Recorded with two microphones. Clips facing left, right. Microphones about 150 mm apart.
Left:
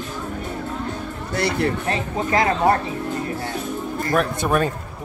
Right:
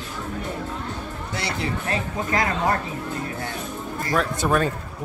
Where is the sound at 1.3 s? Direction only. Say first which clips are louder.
Left 8 dB; 55° left (ahead or behind).